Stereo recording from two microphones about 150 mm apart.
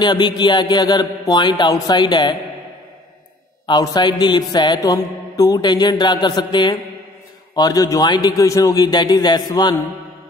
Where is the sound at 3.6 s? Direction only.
30° left (ahead or behind).